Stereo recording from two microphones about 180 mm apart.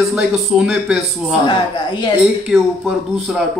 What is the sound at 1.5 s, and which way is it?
Speech, 25° left (ahead or behind).